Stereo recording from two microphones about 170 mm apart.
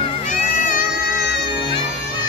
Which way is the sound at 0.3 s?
50° left (ahead or behind).